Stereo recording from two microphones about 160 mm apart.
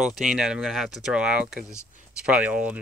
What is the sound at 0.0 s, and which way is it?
Speech, centre (ahead or behind).